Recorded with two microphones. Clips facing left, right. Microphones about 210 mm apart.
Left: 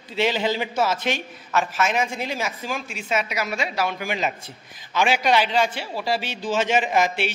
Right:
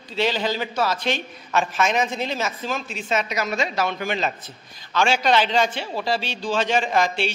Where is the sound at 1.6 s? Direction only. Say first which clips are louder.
Right 1 dB; 5° left (ahead or behind).